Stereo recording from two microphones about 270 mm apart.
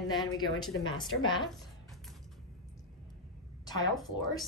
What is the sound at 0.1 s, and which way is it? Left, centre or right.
Speech, centre.